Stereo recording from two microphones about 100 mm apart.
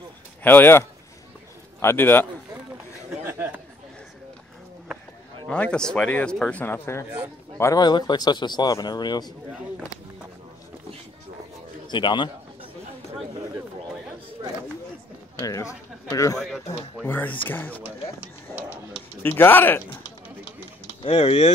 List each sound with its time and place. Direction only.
0.4 s speech: 20° left (ahead or behind)
3.3 s chatter: 20° right (ahead or behind)
5.5 s speech: 10° left (ahead or behind)
6.6 s speech: 25° left (ahead or behind)
7.7 s speech: 40° left (ahead or behind)
11.9 s speech: 50° left (ahead or behind)
15.3 s speech: 35° left (ahead or behind)
16.3 s speech: centre (ahead or behind)
17.0 s speech: 20° left (ahead or behind)
18.5 s a sound: 20° right (ahead or behind)
19.2 s speech: 20° left (ahead or behind)
21.0 s speech: 80° left